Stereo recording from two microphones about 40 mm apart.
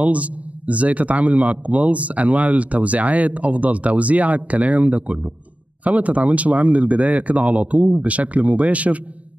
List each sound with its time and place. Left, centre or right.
0.0 s a man's voice: right